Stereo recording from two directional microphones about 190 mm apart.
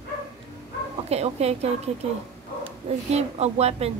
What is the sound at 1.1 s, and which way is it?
Speech, 35° right (ahead or behind).